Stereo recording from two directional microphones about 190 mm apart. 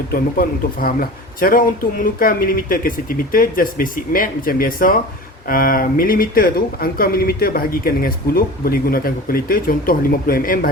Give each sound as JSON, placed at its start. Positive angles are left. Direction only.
{"t": 0.1, "sound": "speech", "side_deg": 50}